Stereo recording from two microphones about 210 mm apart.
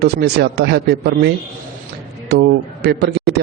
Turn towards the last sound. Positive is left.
turn(degrees=-50)  # may be behind; listen again after turning